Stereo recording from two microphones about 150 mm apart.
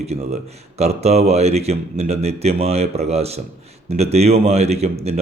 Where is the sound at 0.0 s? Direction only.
45° right (ahead or behind).